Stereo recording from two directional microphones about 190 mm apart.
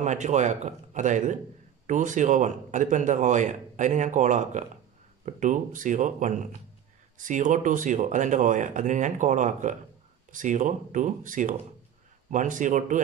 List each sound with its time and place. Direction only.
0.0 s a man's voice: 40° right (ahead or behind)